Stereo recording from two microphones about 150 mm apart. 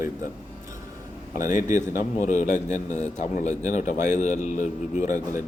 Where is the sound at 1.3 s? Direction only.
60° left (ahead or behind).